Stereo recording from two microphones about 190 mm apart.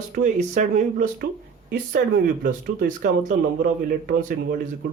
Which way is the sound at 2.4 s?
50° right (ahead or behind).